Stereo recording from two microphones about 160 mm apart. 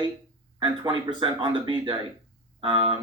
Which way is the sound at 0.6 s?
30° right (ahead or behind).